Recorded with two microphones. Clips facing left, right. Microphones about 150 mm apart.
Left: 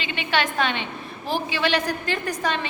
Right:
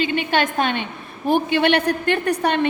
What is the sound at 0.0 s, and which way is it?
A woman's voice, 45° right (ahead or behind).